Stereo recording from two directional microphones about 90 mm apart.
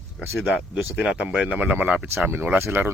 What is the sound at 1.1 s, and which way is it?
Speech, 10° right (ahead or behind).